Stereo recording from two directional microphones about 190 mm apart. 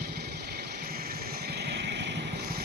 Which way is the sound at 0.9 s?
55° right (ahead or behind).